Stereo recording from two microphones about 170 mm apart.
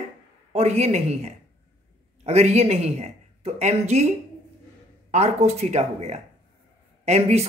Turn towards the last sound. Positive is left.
turn(degrees=-40)  # may be behind; listen again after turning